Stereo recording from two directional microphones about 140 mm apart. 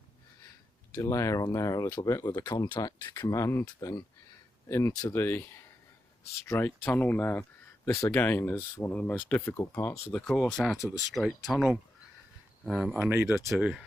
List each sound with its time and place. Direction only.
0.9 s speech: 20° left (ahead or behind)
3.1 s speech: 25° left (ahead or behind); by 13.0 s centre (ahead or behind)
13.0 s speech: 15° right (ahead or behind)
13.2 s speech: 5° right (ahead or behind)